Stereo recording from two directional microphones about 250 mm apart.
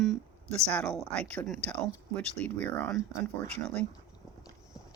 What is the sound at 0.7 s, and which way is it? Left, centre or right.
Speech, centre.